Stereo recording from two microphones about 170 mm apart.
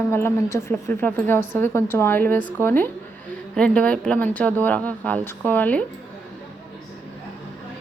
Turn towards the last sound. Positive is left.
turn(degrees=10)  # may be behind; listen again after turning